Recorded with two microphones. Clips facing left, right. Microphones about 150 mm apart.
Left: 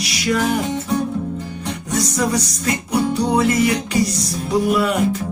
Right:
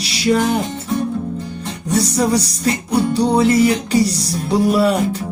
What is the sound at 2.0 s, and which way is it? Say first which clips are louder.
Music: right 4 dB; 30° right (ahead or behind).